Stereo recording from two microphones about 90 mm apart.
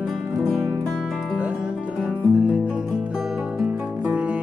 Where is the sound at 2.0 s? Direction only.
15° right (ahead or behind).